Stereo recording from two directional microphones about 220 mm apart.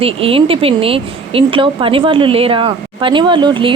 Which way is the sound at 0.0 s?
25° right (ahead or behind).